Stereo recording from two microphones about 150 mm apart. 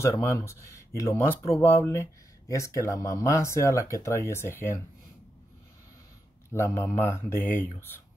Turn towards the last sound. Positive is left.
turn(degrees=15)  # may be behind; listen again after turning